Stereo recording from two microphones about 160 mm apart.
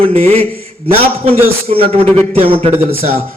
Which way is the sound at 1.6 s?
40° right (ahead or behind).